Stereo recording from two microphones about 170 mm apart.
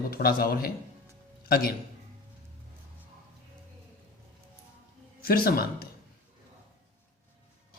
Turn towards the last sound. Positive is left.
turn(degrees=65)  # may be behind; listen again after turning